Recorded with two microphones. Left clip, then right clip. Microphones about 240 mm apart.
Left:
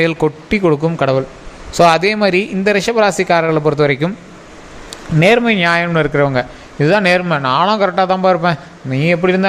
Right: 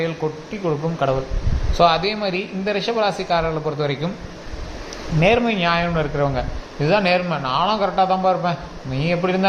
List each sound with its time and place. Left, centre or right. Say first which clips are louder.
0.0 s a man's voice: left 9 dB; left
5.2 s a man's voice: left 6 dB; left